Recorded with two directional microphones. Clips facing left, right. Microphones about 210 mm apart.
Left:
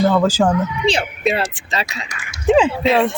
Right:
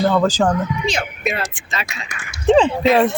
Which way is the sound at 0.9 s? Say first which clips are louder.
Left 4 dB; 30° left (ahead or behind).